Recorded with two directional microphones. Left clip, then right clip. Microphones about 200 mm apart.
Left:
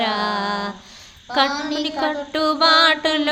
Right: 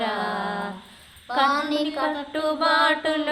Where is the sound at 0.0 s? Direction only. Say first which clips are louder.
Left 5 dB; 55° left (ahead or behind).